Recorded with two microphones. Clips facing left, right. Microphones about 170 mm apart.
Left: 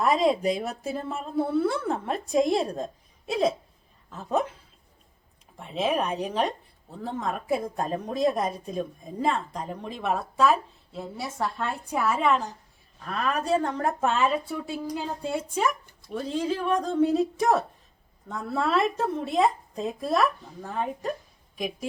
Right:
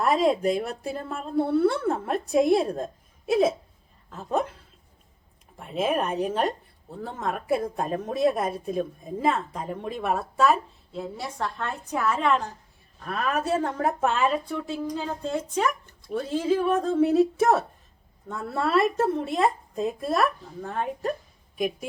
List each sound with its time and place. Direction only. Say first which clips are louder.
0.0 s a woman's voice: right 1 dB; centre (ahead or behind)
5.5 s a woman's voice: right 1 dB; centre (ahead or behind)